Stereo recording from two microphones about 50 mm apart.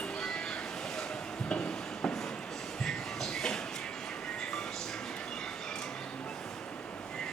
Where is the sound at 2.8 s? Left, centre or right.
Centre.